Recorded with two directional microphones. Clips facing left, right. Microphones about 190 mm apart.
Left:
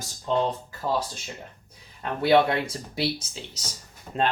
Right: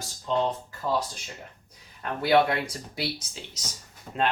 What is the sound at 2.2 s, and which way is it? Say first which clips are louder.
Speech: left 2 dB; 25° left (ahead or behind).